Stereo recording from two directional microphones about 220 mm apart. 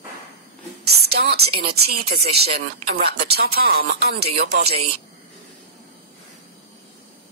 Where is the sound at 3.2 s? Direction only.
45° right (ahead or behind).